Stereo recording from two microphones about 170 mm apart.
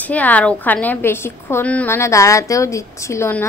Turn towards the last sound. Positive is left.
turn(degrees=15)  # may be behind; listen again after turning